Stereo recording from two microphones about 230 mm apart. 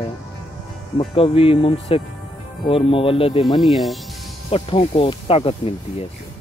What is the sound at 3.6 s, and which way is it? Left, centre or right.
Speech, centre.